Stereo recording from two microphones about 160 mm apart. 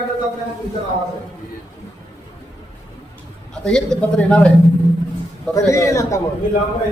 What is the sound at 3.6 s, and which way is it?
Speech, 5° left (ahead or behind).